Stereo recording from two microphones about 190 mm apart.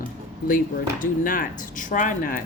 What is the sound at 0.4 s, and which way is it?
A woman's voice, 45° left (ahead or behind).